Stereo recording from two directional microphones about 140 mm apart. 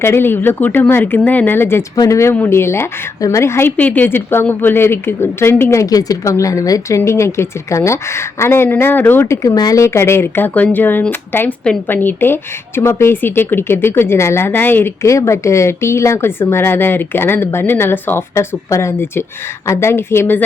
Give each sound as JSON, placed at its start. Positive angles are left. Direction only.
{"t": 0.0, "sound": "a woman's voice", "side_deg": 15}